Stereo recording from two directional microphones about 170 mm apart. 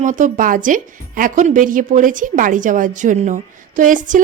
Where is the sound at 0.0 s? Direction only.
50° right (ahead or behind).